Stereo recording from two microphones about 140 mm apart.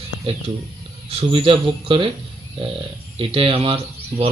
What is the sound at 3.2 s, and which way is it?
Speech, 40° right (ahead or behind).